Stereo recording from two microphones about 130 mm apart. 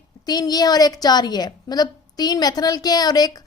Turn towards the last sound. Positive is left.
turn(degrees=30)  # may be behind; listen again after turning